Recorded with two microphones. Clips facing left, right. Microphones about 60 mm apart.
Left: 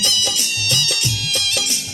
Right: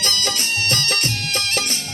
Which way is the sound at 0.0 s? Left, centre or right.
Right.